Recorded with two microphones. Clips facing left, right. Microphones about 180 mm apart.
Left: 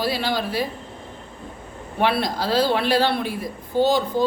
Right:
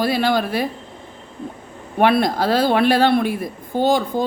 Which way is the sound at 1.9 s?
50° right (ahead or behind).